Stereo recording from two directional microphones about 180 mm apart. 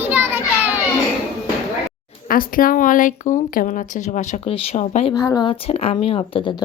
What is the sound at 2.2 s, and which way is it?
Speech, 50° left (ahead or behind).